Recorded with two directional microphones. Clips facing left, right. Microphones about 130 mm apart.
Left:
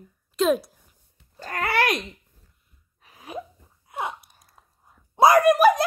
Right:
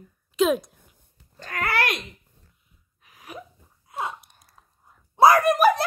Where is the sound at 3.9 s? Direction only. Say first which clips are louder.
Even; 20° left (ahead or behind).